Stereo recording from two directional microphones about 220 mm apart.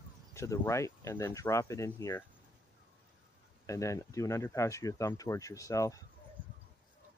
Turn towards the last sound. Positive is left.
turn(degrees=15)  # may be behind; listen again after turning